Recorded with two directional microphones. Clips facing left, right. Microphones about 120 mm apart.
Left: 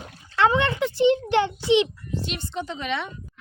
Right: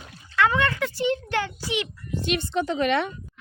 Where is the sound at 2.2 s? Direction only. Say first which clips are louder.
Right 9 dB; 65° right (ahead or behind).